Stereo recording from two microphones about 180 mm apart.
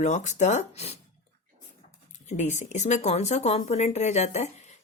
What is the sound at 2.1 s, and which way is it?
Speech, 40° left (ahead or behind).